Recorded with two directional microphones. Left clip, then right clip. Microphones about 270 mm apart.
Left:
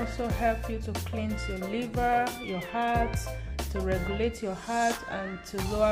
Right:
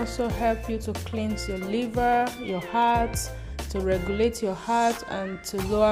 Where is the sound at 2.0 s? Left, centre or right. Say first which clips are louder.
Right 3 dB; right.